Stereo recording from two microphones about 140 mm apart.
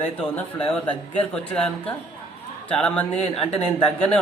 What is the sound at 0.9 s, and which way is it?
Speech, 10° left (ahead or behind).